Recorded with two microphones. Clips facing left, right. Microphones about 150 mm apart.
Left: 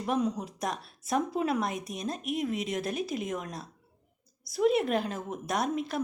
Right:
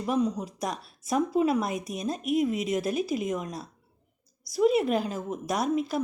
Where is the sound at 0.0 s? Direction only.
Centre (ahead or behind).